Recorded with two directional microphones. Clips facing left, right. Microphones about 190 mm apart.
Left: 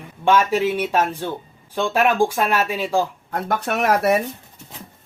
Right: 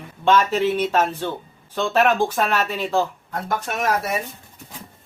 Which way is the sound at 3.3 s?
60° left (ahead or behind).